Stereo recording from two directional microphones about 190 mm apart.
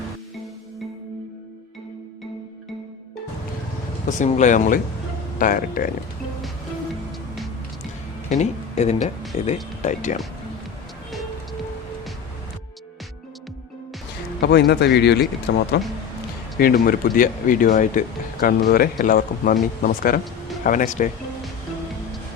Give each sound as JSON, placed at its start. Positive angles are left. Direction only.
{"t": 4.0, "sound": "speech", "side_deg": 40}
{"t": 8.3, "sound": "speech", "side_deg": 35}
{"t": 14.4, "sound": "speech", "side_deg": 60}
{"t": 16.6, "sound": "speech", "side_deg": 50}